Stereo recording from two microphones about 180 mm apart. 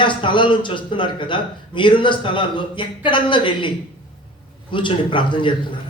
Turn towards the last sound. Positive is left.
turn(degrees=25)  # may be behind; listen again after turning